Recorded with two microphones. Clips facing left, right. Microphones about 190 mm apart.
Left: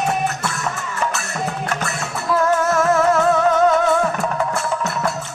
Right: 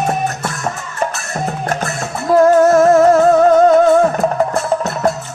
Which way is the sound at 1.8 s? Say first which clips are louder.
Right 4 dB; 45° right (ahead or behind).